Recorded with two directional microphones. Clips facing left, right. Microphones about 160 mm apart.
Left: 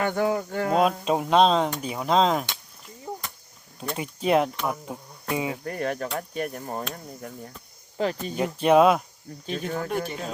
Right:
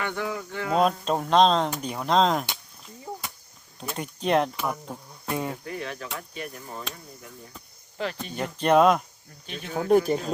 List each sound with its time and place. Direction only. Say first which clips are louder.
0.0 s speech: left 6 dB; 40° left (ahead or behind)
0.8 s speech: right 1 dB; 5° left (ahead or behind)
3.8 s speech: left 2 dB; 5° left (ahead or behind)
5.6 s speech: left 6 dB; 50° left (ahead or behind)
8.2 s speech: left 3 dB; 5° left (ahead or behind)
9.5 s speech: left 2 dB; 45° left (ahead or behind)